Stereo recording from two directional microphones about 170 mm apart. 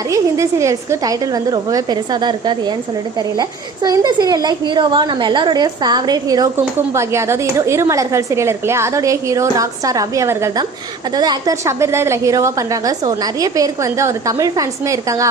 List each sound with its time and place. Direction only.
0.1 s a woman's voice: 20° right (ahead or behind)
3.8 s a woman's voice: 25° right (ahead or behind)